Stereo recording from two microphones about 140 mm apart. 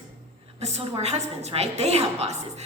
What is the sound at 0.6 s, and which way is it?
A woman's voice, 50° right (ahead or behind).